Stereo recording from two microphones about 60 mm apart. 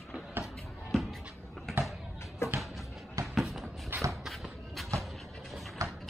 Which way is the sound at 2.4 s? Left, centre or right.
Left.